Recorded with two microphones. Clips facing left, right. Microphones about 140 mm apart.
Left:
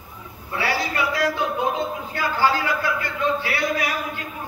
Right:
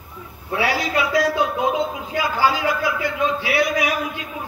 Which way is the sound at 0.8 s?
90° right.